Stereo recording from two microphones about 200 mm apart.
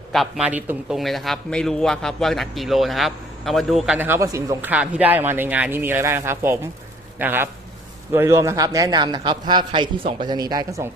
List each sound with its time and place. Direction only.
0.1 s a man's voice: centre (ahead or behind)